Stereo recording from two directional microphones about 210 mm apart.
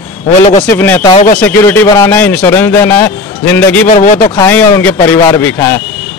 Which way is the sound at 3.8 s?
40° left (ahead or behind).